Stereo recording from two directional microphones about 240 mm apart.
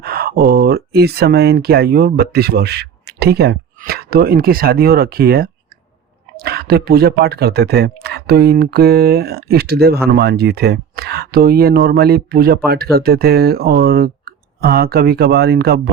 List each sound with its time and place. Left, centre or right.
0.0 s speech: right